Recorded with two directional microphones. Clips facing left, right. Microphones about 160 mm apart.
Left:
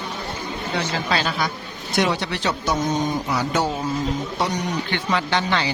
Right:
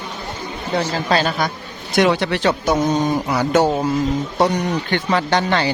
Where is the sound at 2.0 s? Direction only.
60° right (ahead or behind).